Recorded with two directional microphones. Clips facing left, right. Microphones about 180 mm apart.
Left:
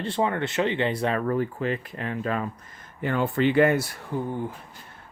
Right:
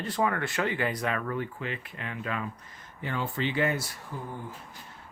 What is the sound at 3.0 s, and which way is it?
Speech, 55° left (ahead or behind).